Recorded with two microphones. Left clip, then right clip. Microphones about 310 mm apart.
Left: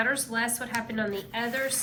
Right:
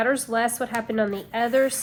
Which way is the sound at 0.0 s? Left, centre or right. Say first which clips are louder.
Right 5 dB; centre.